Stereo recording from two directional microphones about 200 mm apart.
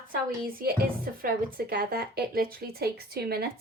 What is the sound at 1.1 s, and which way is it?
A woman's voice, 45° right (ahead or behind).